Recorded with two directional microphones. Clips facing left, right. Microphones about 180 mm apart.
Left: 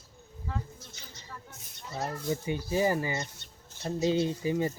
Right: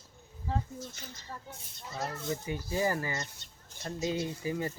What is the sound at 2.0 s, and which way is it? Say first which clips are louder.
Speech: left 2 dB; 30° left (ahead or behind).